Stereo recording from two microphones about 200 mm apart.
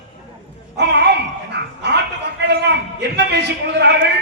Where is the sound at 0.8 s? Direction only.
55° right (ahead or behind).